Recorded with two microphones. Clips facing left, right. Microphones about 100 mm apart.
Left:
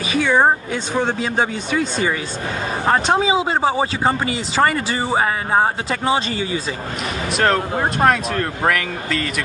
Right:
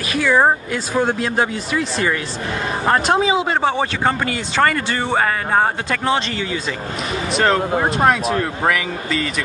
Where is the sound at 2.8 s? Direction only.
5° left (ahead or behind).